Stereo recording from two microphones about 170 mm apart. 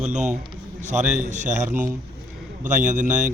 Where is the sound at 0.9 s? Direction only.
45° right (ahead or behind).